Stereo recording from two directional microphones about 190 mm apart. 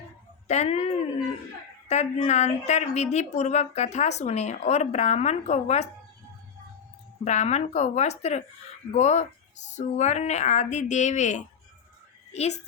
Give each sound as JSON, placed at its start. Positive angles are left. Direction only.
{"t": 0.4, "sound": "speech", "side_deg": 35}
{"t": 7.3, "sound": "a woman's voice", "side_deg": 35}